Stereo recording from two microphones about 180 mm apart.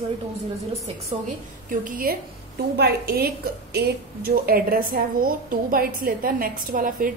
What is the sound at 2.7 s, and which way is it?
A woman's voice, 65° right (ahead or behind).